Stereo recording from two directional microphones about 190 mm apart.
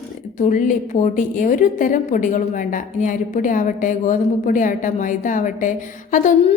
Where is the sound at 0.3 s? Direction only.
40° left (ahead or behind).